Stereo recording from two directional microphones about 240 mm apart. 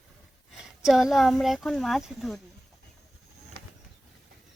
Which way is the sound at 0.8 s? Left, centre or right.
Centre.